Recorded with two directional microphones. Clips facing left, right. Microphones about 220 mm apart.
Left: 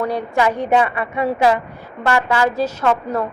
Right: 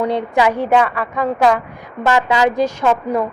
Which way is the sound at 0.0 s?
20° right (ahead or behind).